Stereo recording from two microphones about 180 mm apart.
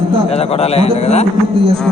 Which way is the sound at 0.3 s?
35° left (ahead or behind).